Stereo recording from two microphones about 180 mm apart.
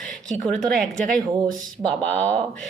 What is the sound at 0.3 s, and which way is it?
Speech, centre (ahead or behind).